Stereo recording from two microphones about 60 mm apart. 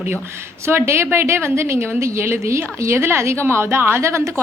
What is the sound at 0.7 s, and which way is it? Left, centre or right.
A woman's voice, right.